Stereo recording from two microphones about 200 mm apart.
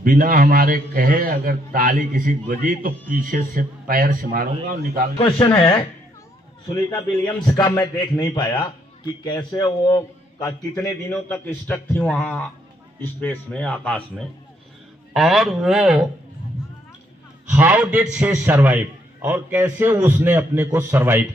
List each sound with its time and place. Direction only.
0.0 s a man's voice: 45° right (ahead or behind)
5.1 s a man's voice: 20° left (ahead or behind)
6.9 s a man's voice: 20° left (ahead or behind); by 16.0 s centre (ahead or behind)
17.5 s a man's voice: 10° right (ahead or behind)